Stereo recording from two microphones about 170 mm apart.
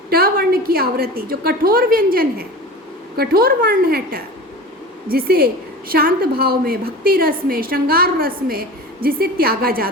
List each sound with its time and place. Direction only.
0.1 s a woman's voice: 60° right (ahead or behind)